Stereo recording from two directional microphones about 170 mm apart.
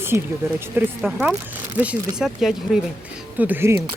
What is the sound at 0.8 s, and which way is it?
Speech, 10° right (ahead or behind).